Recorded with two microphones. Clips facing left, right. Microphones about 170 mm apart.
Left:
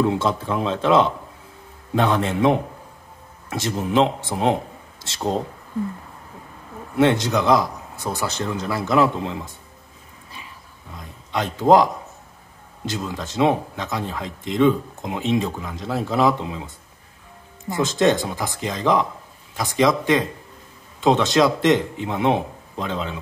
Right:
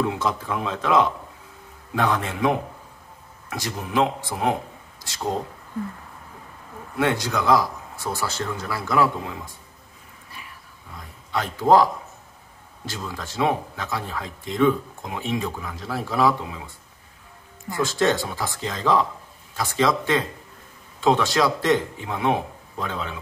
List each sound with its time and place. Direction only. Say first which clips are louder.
0.0 s speech: left 4 dB; 30° left (ahead or behind)
7.0 s speech: left 5 dB; 25° left (ahead or behind)
11.0 s a man's voice: left 2 dB; 20° left (ahead or behind)